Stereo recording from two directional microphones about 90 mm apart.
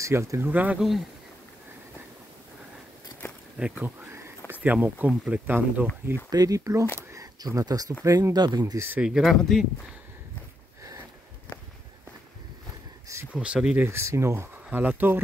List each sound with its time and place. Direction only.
0.0 s speech: 35° right (ahead or behind)
0.5 s speech: 20° right (ahead or behind)
0.7 s speech: centre (ahead or behind)
3.5 s speech: 15° right (ahead or behind)
6.3 s speech: 40° right (ahead or behind)
8.7 s speech: 25° right (ahead or behind)
9.2 s speech: 5° left (ahead or behind)
10.8 s a sound: 35° right (ahead or behind)
13.3 s speech: 10° right (ahead or behind)
13.8 s speech: 30° right (ahead or behind)
14.7 s speech: 20° right (ahead or behind)